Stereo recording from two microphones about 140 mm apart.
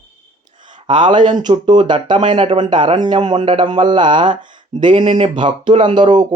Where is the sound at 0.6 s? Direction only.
35° right (ahead or behind).